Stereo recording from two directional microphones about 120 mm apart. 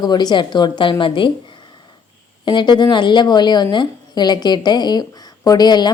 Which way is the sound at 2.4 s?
40° left (ahead or behind).